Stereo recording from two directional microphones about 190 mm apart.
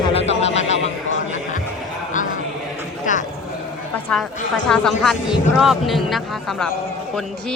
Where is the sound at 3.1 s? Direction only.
40° left (ahead or behind).